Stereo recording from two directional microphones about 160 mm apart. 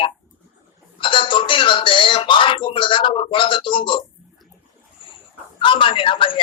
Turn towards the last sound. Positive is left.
turn(degrees=30)  # may be behind; listen again after turning